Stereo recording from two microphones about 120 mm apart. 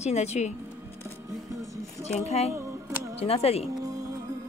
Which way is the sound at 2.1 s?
60° left (ahead or behind).